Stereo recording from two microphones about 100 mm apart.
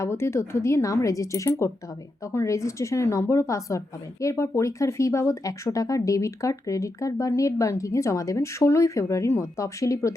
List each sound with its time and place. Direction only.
0.0 s a woman's voice: 30° left (ahead or behind)